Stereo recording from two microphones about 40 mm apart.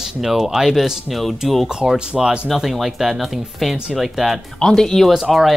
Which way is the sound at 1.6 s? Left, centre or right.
Centre.